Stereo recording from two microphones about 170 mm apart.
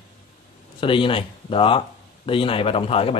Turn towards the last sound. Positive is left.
turn(degrees=35)  # may be behind; listen again after turning